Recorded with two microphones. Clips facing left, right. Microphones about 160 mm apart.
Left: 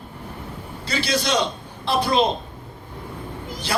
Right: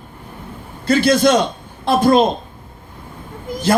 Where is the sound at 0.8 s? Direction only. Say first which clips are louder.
Right 11 dB; 50° right (ahead or behind).